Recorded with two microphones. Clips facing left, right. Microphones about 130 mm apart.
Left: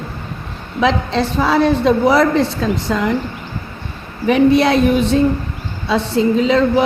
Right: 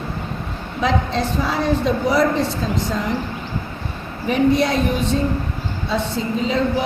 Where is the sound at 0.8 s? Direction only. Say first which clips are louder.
Left 4 dB; 85° left.